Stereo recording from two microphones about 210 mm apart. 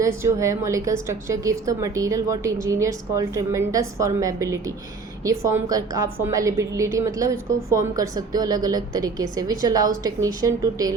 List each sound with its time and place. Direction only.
0.0 s a woman's voice: 15° right (ahead or behind)